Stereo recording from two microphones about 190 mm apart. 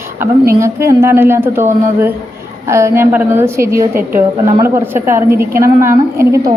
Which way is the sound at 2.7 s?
15° right (ahead or behind).